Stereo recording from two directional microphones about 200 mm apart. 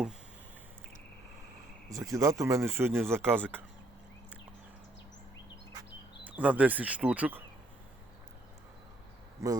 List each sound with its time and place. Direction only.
1.9 s speech: 15° right (ahead or behind)
6.2 s speech: 5° right (ahead or behind)
9.4 s speech: 15° right (ahead or behind)